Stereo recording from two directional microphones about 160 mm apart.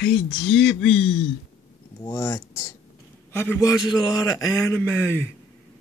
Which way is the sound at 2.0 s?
20° left (ahead or behind).